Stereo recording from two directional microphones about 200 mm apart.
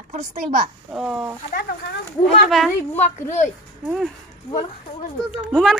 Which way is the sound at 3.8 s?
Centre (ahead or behind).